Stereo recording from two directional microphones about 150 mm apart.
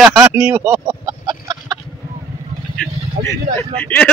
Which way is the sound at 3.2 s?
70° right (ahead or behind).